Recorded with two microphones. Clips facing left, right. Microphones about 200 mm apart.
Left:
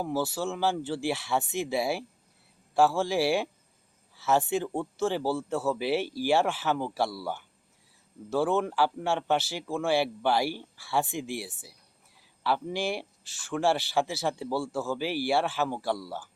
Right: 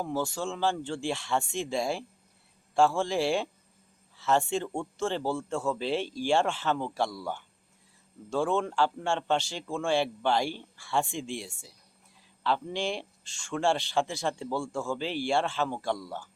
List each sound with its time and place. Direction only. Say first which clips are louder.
0.0 s a man's voice: left 2 dB; 5° left (ahead or behind)